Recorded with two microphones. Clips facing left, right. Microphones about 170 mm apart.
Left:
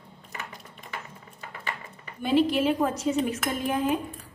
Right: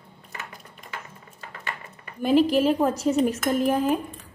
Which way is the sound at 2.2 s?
40° right (ahead or behind).